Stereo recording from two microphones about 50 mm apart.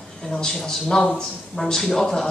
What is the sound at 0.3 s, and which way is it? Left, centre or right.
A woman's voice, centre.